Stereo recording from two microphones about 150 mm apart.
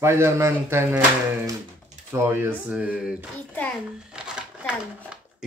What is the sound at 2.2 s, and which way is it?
Speech, 15° right (ahead or behind).